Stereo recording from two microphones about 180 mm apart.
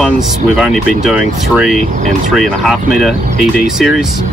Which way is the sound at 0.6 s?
Centre (ahead or behind).